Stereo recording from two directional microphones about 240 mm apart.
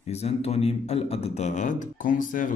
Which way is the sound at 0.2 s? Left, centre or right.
Left.